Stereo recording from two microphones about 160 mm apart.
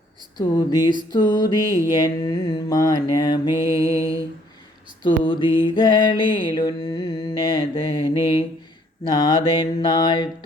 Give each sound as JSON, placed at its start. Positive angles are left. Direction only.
{"t": 0.3, "sound": "mantra", "side_deg": 25}
{"t": 3.7, "sound": "mantra", "side_deg": -20}
{"t": 5.0, "sound": "mantra", "side_deg": 30}
{"t": 9.0, "sound": "mantra", "side_deg": 25}